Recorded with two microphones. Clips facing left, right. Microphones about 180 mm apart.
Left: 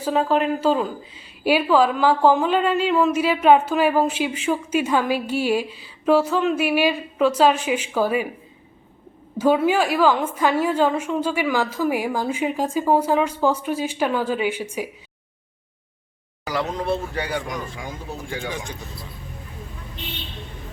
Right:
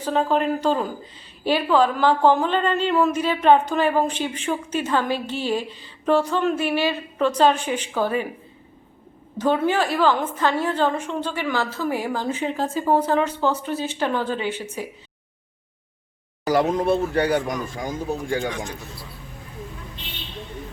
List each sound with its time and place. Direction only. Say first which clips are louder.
0.0 s a woman's voice: left 1 dB; 5° left (ahead or behind)
9.4 s a woman's voice: left 2 dB; 10° left (ahead or behind)
16.5 s speech: right 5 dB; 45° right (ahead or behind)